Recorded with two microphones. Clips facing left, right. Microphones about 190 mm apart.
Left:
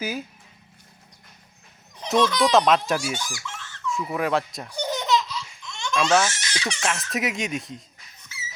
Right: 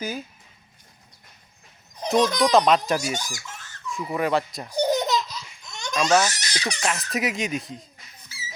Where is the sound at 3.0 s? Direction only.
40° right (ahead or behind).